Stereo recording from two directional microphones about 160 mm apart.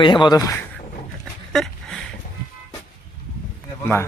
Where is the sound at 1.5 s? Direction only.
Centre (ahead or behind).